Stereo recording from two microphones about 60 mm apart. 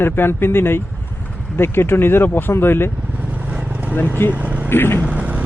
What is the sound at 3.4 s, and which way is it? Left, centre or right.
Vehicle, right.